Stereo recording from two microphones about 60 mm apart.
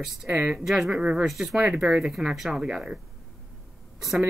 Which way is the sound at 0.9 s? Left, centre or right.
Centre.